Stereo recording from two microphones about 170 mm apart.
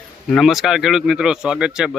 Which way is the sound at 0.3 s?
Centre (ahead or behind).